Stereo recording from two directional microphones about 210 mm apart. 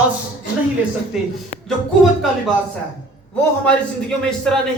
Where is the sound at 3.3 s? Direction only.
5° left (ahead or behind).